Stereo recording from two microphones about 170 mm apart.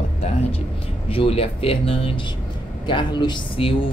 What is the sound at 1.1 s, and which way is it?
Speech, 35° left (ahead or behind).